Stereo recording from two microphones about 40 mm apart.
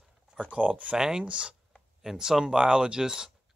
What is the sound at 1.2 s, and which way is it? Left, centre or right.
Speech, right.